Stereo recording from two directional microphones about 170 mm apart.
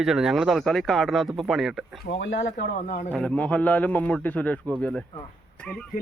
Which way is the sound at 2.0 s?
90° left.